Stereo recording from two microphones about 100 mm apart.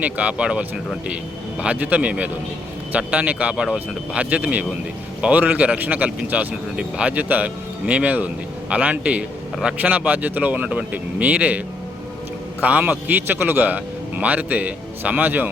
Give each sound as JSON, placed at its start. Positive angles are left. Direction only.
{"t": 0.0, "sound": "speech", "side_deg": -15}
{"t": 1.6, "sound": "speech", "side_deg": -15}